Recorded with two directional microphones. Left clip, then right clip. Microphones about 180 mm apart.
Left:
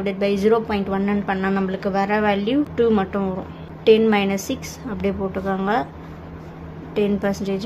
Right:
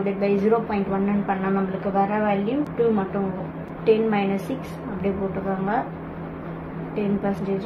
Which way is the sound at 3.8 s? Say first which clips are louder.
Left 5 dB; 40° left (ahead or behind).